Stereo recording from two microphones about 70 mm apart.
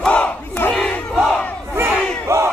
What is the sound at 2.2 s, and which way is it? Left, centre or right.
Crowd, right.